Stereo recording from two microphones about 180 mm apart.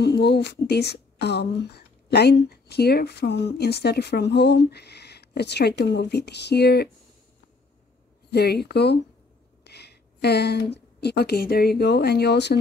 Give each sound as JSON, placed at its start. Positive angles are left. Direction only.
{"t": 0.0, "sound": "a woman's voice", "side_deg": 65}
{"t": 8.3, "sound": "speech", "side_deg": 65}